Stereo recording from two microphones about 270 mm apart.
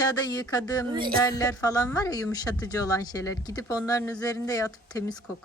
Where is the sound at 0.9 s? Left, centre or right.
Centre.